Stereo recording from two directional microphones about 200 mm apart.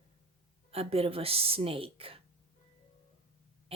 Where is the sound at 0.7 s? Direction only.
30° right (ahead or behind).